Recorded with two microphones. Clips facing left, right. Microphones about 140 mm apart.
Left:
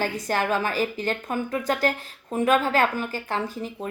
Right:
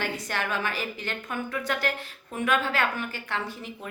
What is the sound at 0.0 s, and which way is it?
Speech, 40° left (ahead or behind).